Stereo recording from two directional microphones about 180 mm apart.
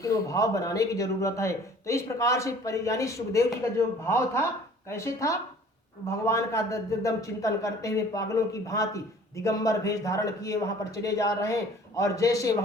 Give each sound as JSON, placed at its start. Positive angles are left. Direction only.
{"t": 0.0, "sound": "a man's voice", "side_deg": 20}